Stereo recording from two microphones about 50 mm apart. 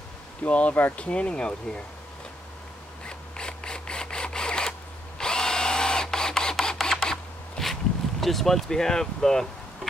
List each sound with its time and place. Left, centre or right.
0.4 s speech: left
3.1 s filing: centre
5.2 s drill: centre
6.6 s a sound: centre
8.2 s speech: centre